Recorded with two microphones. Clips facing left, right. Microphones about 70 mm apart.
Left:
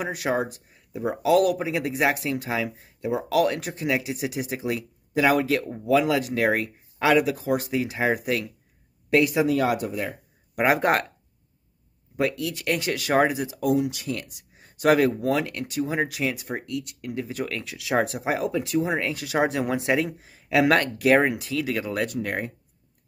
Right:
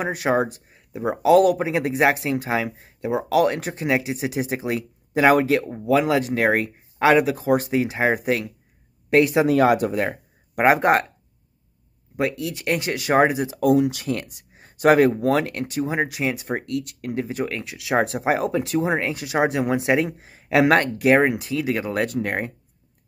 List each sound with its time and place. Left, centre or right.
0.0 s speech: right
5.6 s speech: right
9.5 s speech: right
10.5 s a sound: right
10.8 s speech: centre
12.2 s speech: right
13.6 s speech: right
17.9 s speech: right
20.2 s speech: right